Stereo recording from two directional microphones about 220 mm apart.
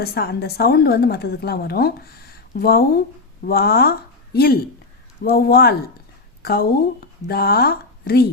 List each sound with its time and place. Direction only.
0.0 s a woman's voice: 45° left (ahead or behind)